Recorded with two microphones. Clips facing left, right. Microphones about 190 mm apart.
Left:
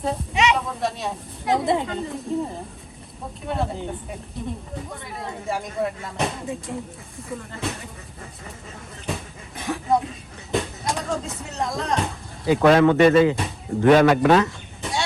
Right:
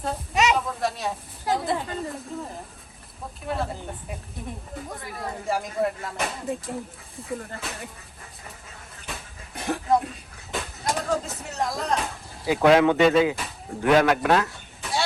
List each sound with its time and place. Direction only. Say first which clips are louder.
0.0 s speech: left 2 dB; centre (ahead or behind)
1.5 s speech: left 6 dB; 20° left (ahead or behind)
3.4 s speech: left 2 dB; centre (ahead or behind)
5.5 s speech: right 1 dB; centre (ahead or behind)
9.6 s a sound: left 1 dB; centre (ahead or behind)
10.5 s speech: left 3 dB; centre (ahead or behind)